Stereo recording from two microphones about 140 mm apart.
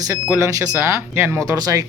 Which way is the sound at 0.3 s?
20° right (ahead or behind).